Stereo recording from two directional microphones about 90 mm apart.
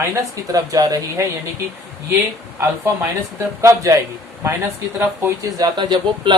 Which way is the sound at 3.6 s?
40° right (ahead or behind).